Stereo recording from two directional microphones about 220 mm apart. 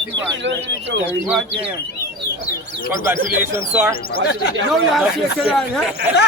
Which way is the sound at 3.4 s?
10° right (ahead or behind).